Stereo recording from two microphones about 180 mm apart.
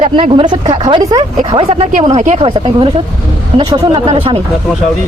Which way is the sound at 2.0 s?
40° right (ahead or behind).